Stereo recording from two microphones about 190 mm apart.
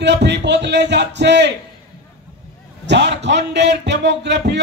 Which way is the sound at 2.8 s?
65° right (ahead or behind).